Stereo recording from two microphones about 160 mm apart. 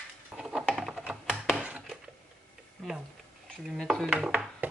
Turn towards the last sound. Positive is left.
turn(degrees=-5)  # may be behind; listen again after turning